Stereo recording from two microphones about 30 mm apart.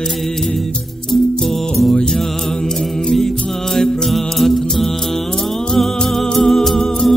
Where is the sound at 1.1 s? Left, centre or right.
Centre.